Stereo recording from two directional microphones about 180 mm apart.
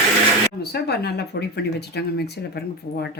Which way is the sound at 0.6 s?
60° left (ahead or behind).